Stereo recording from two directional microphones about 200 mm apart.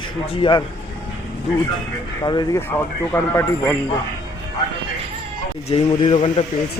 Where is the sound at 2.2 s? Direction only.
20° left (ahead or behind).